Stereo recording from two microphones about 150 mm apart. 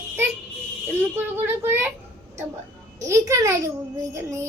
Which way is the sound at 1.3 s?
15° right (ahead or behind).